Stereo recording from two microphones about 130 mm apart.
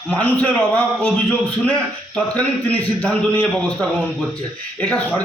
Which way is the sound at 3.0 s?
5° left (ahead or behind).